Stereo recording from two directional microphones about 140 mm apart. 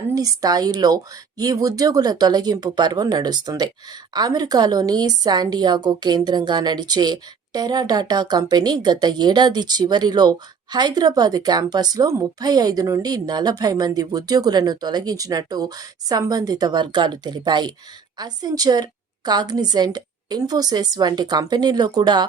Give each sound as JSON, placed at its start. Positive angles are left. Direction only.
{"t": 0.1, "sound": "a woman's voice", "side_deg": -25}